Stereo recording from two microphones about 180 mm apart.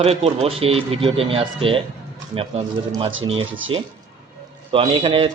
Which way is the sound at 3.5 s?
90° right.